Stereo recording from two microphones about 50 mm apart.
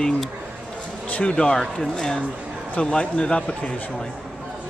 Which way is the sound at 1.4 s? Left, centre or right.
Centre.